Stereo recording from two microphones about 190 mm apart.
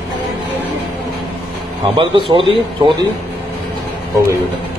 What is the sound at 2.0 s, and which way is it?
Speech, 25° right (ahead or behind).